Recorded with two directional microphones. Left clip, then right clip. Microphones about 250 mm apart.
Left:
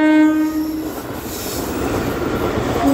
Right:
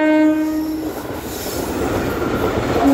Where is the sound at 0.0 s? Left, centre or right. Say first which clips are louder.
Left 1 dB; left.